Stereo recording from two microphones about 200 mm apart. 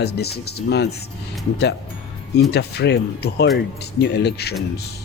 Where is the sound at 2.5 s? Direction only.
55° left (ahead or behind).